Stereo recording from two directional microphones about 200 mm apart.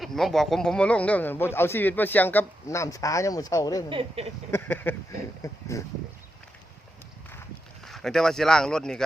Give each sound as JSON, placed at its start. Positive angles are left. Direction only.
{"t": 0.0, "sound": "speech", "side_deg": 0}
{"t": 3.8, "sound": "speech", "side_deg": -30}
{"t": 4.5, "sound": "speech", "side_deg": 10}
{"t": 7.9, "sound": "speech", "side_deg": 0}